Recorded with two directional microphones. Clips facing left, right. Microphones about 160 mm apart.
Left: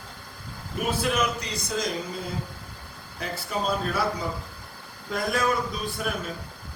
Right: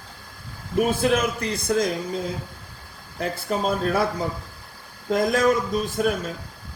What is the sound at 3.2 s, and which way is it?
Speech, 50° right (ahead or behind).